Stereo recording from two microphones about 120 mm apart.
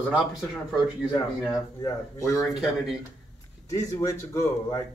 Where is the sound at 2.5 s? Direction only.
5° right (ahead or behind).